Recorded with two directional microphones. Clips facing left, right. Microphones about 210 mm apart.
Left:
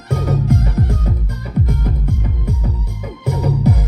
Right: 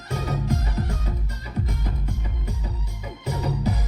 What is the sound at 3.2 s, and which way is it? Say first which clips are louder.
Music: left 8 dB; 55° left (ahead or behind).